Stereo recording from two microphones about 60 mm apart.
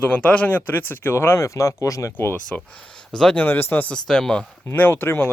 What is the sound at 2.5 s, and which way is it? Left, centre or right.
Speech, left.